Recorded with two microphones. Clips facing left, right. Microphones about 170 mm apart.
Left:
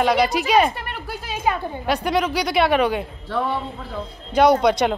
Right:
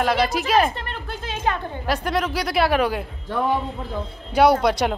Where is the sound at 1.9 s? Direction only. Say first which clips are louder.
Left 2 dB; centre (ahead or behind).